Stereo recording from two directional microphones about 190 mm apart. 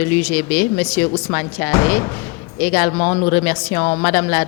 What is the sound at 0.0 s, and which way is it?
Speech, 10° left (ahead or behind).